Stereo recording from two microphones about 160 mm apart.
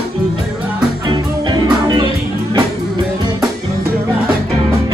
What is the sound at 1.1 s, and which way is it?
Music, 30° right (ahead or behind).